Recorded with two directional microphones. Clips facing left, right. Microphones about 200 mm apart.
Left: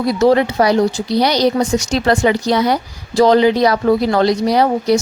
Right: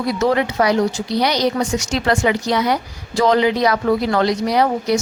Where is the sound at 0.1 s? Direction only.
35° left (ahead or behind).